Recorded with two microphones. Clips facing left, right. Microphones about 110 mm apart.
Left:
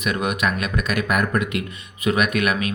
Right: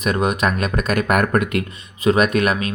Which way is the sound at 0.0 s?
35° right (ahead or behind).